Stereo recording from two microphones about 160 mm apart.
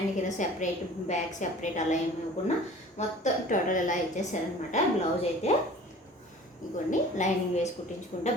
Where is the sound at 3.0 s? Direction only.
45° left (ahead or behind).